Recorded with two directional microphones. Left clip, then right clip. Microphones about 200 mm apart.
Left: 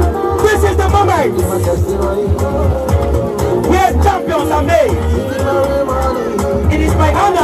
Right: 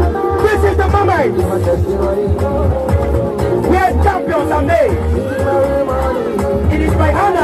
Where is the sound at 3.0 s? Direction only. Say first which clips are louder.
Even; 45° left (ahead or behind).